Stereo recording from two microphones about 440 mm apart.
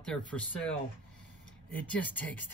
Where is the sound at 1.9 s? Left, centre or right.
Centre.